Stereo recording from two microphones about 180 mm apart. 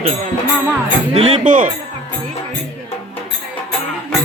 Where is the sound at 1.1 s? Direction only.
35° right (ahead or behind).